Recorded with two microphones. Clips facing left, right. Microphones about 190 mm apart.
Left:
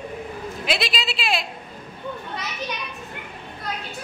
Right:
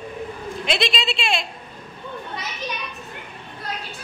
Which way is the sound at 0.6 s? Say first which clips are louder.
Right 2 dB; 5° left (ahead or behind).